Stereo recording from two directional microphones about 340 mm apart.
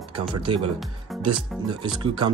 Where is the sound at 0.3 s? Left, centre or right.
Centre.